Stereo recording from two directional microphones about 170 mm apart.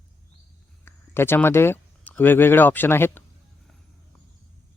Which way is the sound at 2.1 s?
10° left (ahead or behind).